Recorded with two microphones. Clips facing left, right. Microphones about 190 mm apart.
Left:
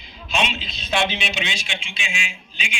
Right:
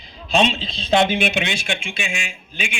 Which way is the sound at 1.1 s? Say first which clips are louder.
Right 7 dB; 55° right (ahead or behind).